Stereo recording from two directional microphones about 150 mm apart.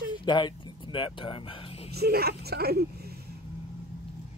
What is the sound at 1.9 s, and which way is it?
Speech, 90° right.